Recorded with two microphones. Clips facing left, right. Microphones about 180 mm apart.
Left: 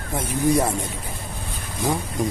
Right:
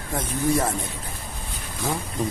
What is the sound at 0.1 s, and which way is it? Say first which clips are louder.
Speech: left 3 dB; 10° left (ahead or behind).